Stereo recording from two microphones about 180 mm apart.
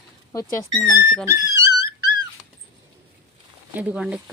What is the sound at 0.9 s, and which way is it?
Speech, 15° right (ahead or behind).